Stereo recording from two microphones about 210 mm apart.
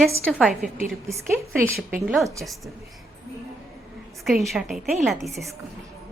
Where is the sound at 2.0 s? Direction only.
Centre (ahead or behind).